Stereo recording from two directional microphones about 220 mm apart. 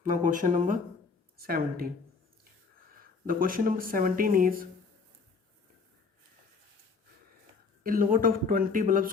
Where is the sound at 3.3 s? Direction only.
40° right (ahead or behind).